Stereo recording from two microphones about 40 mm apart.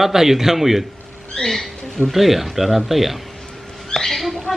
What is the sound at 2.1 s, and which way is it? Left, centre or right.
Speech, centre.